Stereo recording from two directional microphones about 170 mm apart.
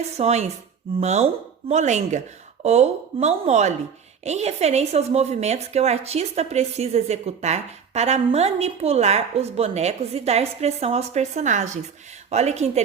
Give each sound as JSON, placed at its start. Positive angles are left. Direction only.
{"t": 0.2, "sound": "a woman's voice", "side_deg": -40}